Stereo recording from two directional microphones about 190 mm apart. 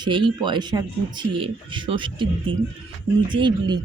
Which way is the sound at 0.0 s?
25° right (ahead or behind).